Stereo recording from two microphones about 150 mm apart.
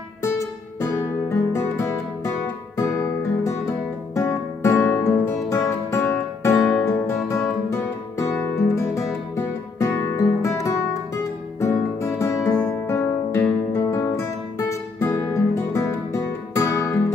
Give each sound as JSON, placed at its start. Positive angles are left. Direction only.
{"t": 0.2, "sound": "music", "side_deg": 20}
{"t": 8.4, "sound": "guitar", "side_deg": 20}
{"t": 9.8, "sound": "music", "side_deg": 15}